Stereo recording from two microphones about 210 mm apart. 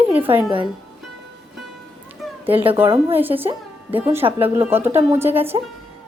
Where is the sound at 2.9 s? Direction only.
25° right (ahead or behind).